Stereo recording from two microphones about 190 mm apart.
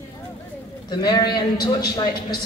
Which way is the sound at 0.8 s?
20° left (ahead or behind).